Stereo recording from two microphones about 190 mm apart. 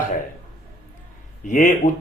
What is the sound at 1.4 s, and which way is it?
Speech, 40° left (ahead or behind).